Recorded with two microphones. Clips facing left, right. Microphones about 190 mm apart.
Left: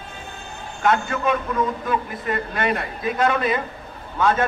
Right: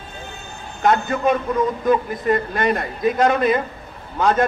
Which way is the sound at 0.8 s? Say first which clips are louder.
Right 3 dB; 40° right (ahead or behind).